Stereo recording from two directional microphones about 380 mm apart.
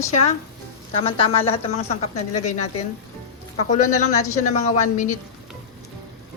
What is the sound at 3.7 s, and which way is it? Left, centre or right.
Speech, centre.